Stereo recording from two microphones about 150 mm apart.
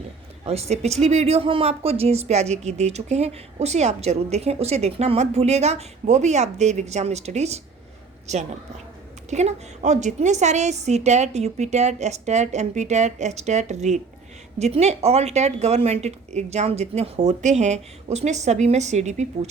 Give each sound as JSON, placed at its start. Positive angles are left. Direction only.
{"t": 0.4, "sound": "speech", "side_deg": -45}